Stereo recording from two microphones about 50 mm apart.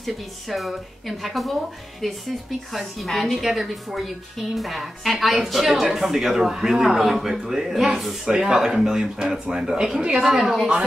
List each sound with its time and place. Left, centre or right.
0.0 s speech: centre